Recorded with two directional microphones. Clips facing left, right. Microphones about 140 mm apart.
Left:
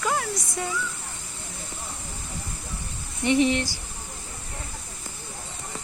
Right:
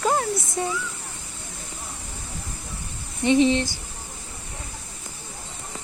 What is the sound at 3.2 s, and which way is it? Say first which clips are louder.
Speech: right 3 dB; 20° right (ahead or behind).